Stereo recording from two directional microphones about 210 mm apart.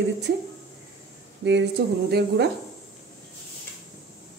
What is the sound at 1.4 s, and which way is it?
Speech, 55° right (ahead or behind).